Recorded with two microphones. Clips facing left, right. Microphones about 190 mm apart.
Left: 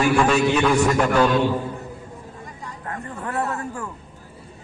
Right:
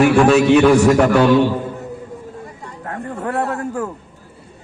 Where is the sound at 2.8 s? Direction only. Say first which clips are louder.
Right 7 dB; 50° right (ahead or behind).